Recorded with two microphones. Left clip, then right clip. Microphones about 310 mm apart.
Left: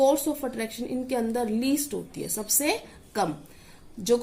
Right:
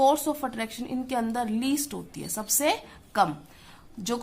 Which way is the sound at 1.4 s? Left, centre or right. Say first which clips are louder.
Left 2 dB; right.